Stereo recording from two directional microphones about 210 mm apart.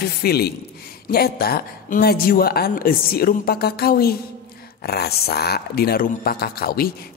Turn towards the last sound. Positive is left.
turn(degrees=45)  # may be behind; listen again after turning